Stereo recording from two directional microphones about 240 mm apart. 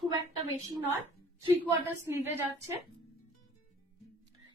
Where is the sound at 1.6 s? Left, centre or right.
Centre.